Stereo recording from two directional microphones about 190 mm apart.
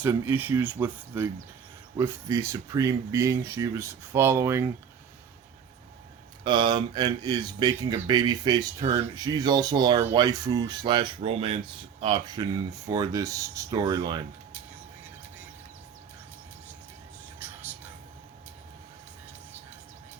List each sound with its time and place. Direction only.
0.0 s speech: 10° right (ahead or behind)
6.4 s speech: 25° right (ahead or behind)
17.4 s a sound: 10° right (ahead or behind)